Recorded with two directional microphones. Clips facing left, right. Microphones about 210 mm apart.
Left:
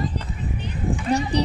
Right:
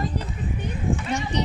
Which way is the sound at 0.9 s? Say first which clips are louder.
Left 4 dB; 35° left (ahead or behind).